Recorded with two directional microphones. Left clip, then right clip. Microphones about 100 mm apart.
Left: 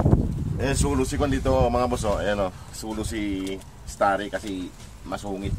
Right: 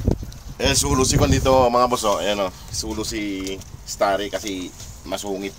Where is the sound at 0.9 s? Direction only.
Centre (ahead or behind).